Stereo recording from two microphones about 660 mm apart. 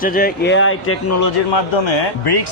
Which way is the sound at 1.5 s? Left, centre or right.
Left.